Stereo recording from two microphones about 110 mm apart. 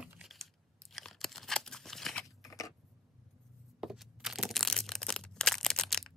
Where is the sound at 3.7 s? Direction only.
5° right (ahead or behind).